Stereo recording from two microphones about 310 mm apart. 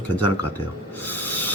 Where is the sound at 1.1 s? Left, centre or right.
Centre.